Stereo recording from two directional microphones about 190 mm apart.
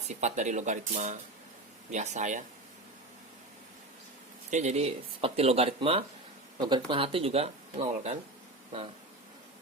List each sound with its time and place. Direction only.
0.1 s speech: 35° right (ahead or behind)
4.5 s speech: 35° right (ahead or behind)